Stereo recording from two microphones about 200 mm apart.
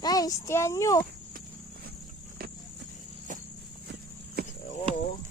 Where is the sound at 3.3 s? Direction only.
40° right (ahead or behind).